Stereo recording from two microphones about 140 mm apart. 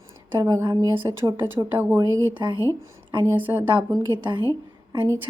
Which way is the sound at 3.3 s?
15° right (ahead or behind).